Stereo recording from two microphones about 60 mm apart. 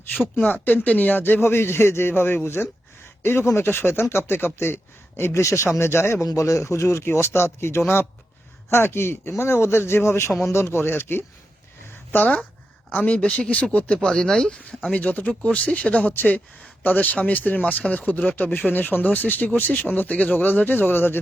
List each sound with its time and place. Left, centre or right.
0.4 s a man's voice: left
6.2 s a man's voice: left
12.1 s speech: left
13.1 s a man's voice: centre; by 21.2 s left